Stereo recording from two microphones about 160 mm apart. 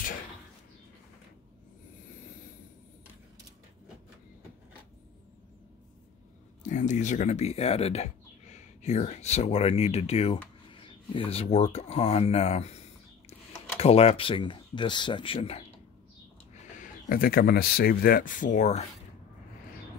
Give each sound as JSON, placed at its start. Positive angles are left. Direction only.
{"t": 6.6, "sound": "speech", "side_deg": 50}
{"t": 16.8, "sound": "speech", "side_deg": 65}